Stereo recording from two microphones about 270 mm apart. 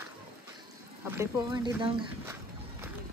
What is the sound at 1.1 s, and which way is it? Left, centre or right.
Speech, centre.